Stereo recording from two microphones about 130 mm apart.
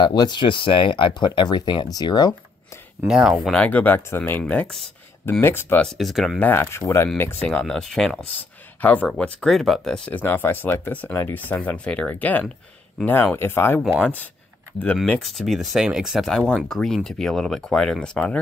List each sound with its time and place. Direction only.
0.0 s speech: 35° left (ahead or behind)
3.1 s speech: 5° right (ahead or behind)
3.5 s speech: 10° left (ahead or behind)
5.4 s speech: 15° left (ahead or behind)
5.9 s speech: centre (ahead or behind)
6.4 s speech: 20° left (ahead or behind)
15.0 s speech: centre (ahead or behind)